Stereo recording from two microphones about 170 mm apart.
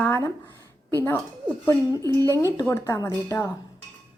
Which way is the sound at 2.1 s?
20° right (ahead or behind).